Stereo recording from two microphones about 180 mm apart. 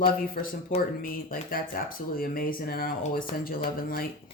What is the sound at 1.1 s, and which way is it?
Speech, 50° left (ahead or behind).